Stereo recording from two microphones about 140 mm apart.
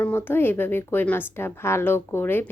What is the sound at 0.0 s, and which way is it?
A woman's voice, 15° left (ahead or behind).